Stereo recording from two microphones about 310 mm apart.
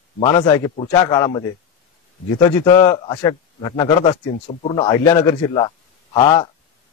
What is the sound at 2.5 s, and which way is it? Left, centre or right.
A man's voice, centre.